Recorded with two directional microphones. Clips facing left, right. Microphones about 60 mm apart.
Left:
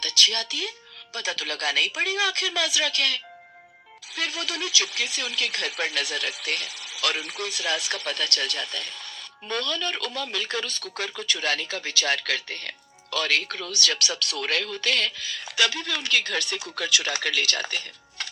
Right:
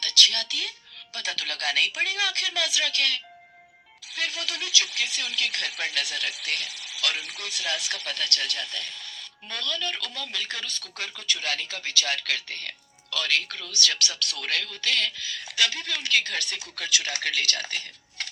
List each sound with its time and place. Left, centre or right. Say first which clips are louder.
0.0 s a woman's voice: even; left